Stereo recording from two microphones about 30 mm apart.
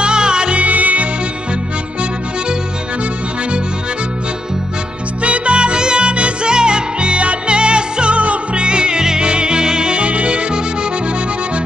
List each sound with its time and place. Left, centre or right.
0.0 s music: right
0.6 s music: right
5.2 s music: right